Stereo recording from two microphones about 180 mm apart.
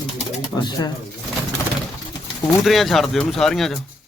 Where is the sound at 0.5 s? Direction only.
25° left (ahead or behind).